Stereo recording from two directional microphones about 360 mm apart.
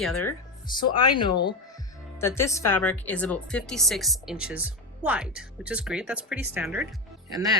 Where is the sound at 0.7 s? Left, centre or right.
Centre.